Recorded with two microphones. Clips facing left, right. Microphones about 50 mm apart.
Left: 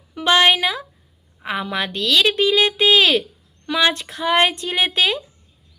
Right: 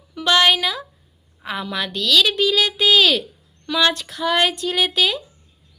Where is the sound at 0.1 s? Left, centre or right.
Left.